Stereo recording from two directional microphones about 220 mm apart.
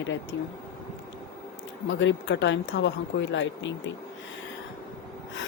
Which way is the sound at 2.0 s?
55° left (ahead or behind).